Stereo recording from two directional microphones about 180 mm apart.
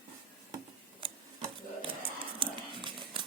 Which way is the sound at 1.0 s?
30° right (ahead or behind).